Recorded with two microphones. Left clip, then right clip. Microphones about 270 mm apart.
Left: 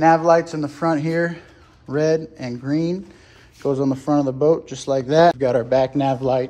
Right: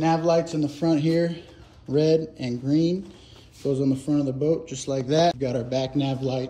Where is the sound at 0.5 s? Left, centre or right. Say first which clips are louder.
Left 3 dB; centre.